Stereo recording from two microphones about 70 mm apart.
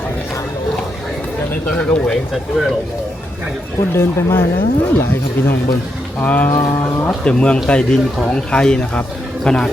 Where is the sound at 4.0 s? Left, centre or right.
Left.